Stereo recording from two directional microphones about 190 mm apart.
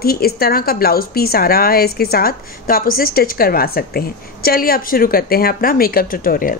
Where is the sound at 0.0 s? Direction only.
50° left (ahead or behind).